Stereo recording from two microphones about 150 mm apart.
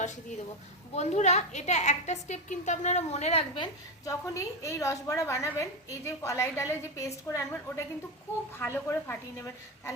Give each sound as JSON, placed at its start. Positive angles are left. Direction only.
{"t": 0.9, "sound": "a woman's voice", "side_deg": 50}
{"t": 4.0, "sound": "a woman's voice", "side_deg": 20}